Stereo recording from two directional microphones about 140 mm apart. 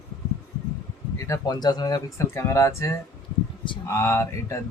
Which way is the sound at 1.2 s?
25° left (ahead or behind).